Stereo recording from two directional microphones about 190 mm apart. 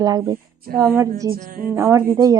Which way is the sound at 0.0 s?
20° right (ahead or behind).